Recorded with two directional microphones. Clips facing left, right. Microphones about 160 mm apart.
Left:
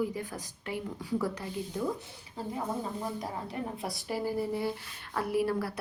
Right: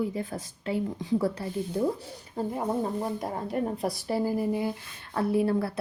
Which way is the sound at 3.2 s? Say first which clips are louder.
Right 6 dB; 45° right (ahead or behind).